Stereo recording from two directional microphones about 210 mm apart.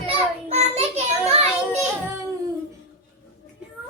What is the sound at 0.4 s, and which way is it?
Child singing, 30° right (ahead or behind).